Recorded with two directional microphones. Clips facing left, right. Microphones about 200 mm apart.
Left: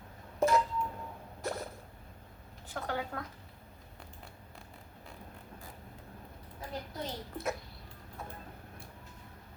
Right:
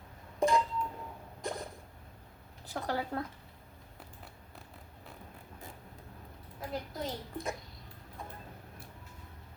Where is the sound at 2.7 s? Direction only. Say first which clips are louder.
Right 2 dB; 35° right (ahead or behind).